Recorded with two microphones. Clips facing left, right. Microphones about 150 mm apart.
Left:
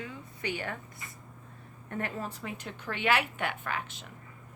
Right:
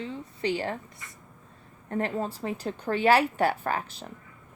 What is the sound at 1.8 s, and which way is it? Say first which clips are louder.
Speech: right 7 dB; 30° right (ahead or behind).